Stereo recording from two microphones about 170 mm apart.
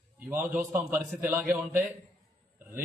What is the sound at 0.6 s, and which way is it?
Speech, 50° right (ahead or behind).